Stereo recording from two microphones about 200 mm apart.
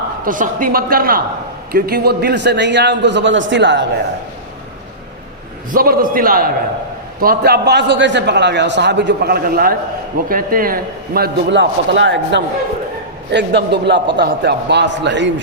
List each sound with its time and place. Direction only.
0.3 s a man's voice: 45° right (ahead or behind); by 3.8 s 65° right (ahead or behind)
5.7 s a man's voice: 45° right (ahead or behind); by 15.3 s 60° right (ahead or behind)